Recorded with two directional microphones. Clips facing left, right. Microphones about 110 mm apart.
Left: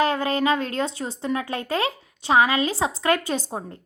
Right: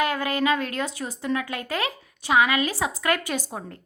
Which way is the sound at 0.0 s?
30° left (ahead or behind).